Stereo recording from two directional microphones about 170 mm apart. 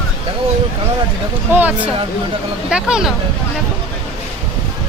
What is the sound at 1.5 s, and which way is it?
Speech, 10° right (ahead or behind).